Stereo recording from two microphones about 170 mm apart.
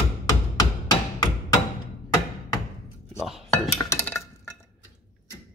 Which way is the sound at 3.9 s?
15° left (ahead or behind).